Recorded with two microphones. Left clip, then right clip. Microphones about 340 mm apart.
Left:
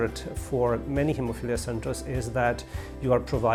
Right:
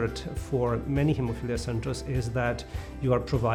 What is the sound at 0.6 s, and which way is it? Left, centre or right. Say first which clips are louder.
Speech: left 3 dB; left.